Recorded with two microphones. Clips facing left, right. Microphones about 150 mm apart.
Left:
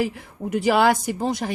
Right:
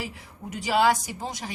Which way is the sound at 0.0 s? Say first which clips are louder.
Left 11 dB; 60° left (ahead or behind).